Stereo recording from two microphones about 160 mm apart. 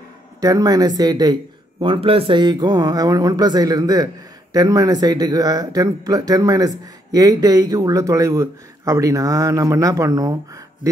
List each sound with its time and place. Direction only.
0.4 s speech: 20° right (ahead or behind)